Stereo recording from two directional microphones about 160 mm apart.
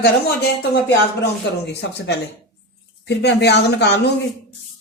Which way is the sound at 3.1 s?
90° left.